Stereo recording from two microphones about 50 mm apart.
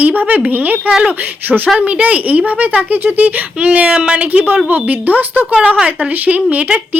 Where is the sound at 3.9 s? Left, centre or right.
Centre.